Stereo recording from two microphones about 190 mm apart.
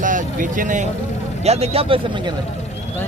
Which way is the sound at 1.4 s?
35° right (ahead or behind).